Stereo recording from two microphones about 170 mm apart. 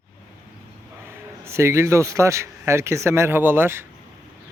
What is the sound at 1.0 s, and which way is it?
A man's voice, 15° right (ahead or behind).